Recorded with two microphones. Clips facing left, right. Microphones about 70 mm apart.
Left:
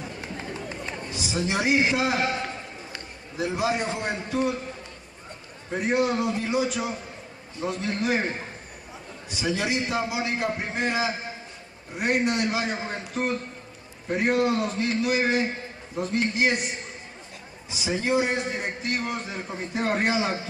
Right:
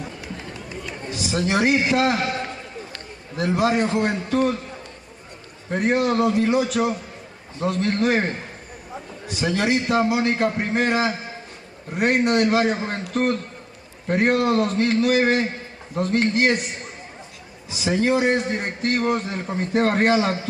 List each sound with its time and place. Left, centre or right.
1.3 s a man's voice: right
3.3 s a man's voice: right
5.7 s a man's voice: right
9.3 s a man's voice: right
17.6 s a man's voice: right